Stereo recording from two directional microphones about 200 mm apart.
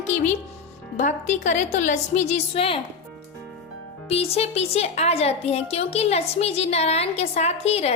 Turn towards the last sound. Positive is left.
turn(degrees=30)  # may be behind; listen again after turning